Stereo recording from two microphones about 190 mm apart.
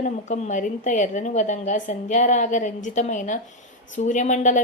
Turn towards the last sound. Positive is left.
turn(degrees=40)  # may be behind; listen again after turning